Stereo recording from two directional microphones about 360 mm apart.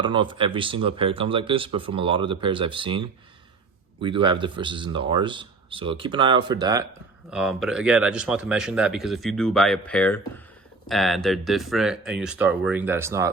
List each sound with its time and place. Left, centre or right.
0.0 s speech: centre